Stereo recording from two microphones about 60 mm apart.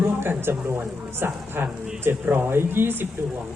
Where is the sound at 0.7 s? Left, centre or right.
Right.